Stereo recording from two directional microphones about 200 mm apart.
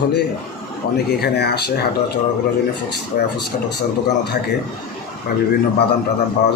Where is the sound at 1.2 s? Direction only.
55° left (ahead or behind).